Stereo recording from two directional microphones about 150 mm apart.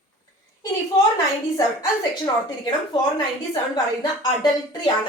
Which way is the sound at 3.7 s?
25° left (ahead or behind).